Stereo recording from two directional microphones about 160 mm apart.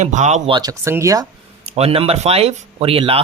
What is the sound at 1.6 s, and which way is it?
Speech, 40° right (ahead or behind).